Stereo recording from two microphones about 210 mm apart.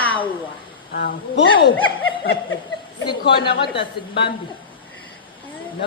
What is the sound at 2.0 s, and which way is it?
Snicker, 70° left (ahead or behind).